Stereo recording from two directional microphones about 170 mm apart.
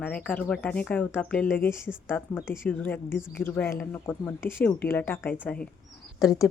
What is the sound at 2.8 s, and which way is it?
Speech, 15° left (ahead or behind).